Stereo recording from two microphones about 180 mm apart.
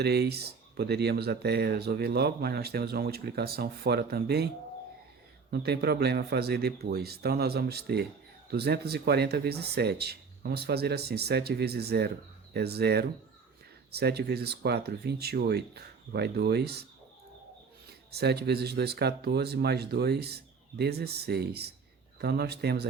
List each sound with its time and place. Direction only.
0.0 s speech: 65° right (ahead or behind)
5.5 s speech: 65° right (ahead or behind)
18.1 s speech: 65° right (ahead or behind)